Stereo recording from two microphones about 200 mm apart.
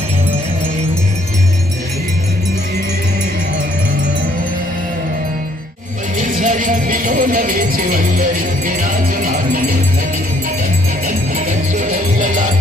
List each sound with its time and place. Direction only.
6.1 s music: 40° right (ahead or behind)
11.1 s music: 40° right (ahead or behind)